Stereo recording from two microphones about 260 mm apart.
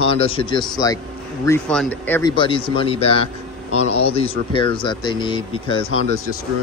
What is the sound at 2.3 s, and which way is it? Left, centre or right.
Speech, centre.